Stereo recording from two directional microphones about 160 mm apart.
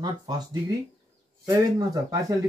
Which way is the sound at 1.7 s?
20° right (ahead or behind).